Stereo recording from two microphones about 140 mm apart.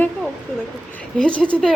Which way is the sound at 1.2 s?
10° left (ahead or behind).